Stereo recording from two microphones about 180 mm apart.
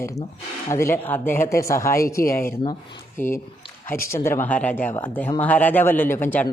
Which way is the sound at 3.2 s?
45° left (ahead or behind).